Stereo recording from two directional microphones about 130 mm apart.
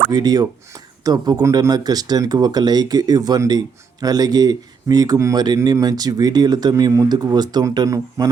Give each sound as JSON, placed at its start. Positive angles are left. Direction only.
{"t": 0.1, "sound": "speech", "side_deg": -30}